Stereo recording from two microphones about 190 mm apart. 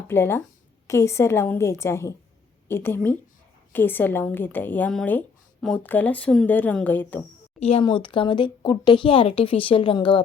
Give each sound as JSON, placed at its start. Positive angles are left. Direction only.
{"t": 0.1, "sound": "speech", "side_deg": 10}
{"t": 7.6, "sound": "speech", "side_deg": 30}